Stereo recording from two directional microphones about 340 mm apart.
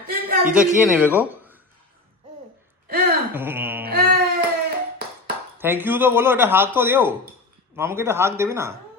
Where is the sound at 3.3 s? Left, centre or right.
Centre.